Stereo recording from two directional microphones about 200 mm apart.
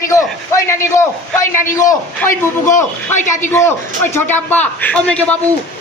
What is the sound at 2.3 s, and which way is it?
A man's voice, 40° left (ahead or behind).